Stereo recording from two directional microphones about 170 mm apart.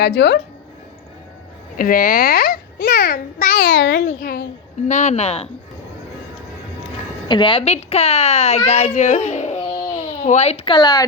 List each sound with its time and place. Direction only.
0.0 s speech: 80° left
1.7 s a child's voice: 55° left (ahead or behind)
4.9 s speech: 45° left (ahead or behind)
7.3 s a woman's voice: 25° left (ahead or behind)